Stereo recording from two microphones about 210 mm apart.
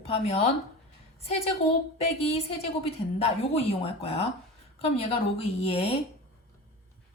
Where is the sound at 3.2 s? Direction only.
30° left (ahead or behind).